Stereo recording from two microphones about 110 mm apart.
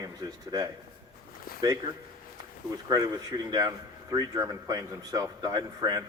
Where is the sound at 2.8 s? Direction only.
35° right (ahead or behind).